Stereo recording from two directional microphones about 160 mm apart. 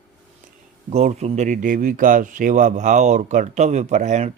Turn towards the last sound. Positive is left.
turn(degrees=-45)  # may be behind; listen again after turning